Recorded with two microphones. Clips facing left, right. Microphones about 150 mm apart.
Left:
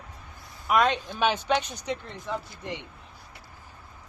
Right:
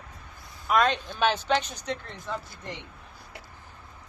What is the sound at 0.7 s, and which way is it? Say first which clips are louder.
Speech: left 1 dB; 10° left (ahead or behind).